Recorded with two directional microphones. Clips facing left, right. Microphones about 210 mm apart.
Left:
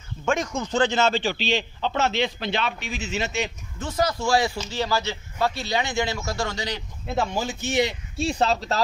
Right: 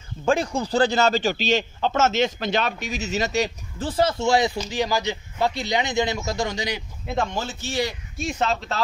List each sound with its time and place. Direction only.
0.2 s a man's voice: 35° right (ahead or behind); by 6.8 s 15° right (ahead or behind)
7.1 s speech: 10° left (ahead or behind); by 8.8 s 35° left (ahead or behind)